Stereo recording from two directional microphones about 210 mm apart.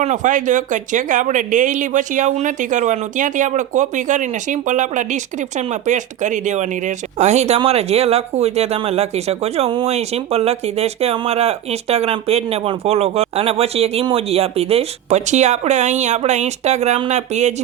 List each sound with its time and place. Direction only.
0.0 s speech: 35° right (ahead or behind)